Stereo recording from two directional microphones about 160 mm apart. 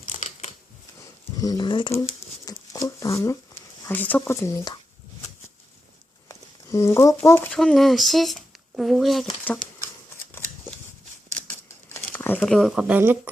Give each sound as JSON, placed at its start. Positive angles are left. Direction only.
{"t": 0.1, "sound": "scissors", "side_deg": 50}
{"t": 1.4, "sound": "speech", "side_deg": 25}
{"t": 6.2, "sound": "a sound", "side_deg": 20}
{"t": 7.3, "sound": "speech", "side_deg": 15}
{"t": 12.1, "sound": "speech", "side_deg": 10}
{"t": 12.9, "sound": "speech", "side_deg": -10}